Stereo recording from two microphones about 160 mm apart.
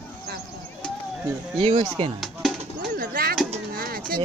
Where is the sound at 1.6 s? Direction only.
35° right (ahead or behind).